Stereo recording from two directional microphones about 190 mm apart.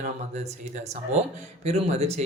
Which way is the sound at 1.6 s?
35° right (ahead or behind).